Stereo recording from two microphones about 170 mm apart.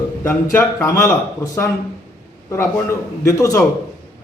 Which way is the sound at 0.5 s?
15° left (ahead or behind).